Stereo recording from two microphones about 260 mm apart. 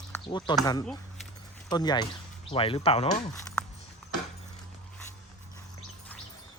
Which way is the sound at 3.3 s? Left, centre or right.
Centre.